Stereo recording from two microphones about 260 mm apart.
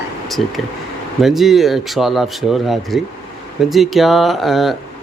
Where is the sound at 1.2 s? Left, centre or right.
Centre.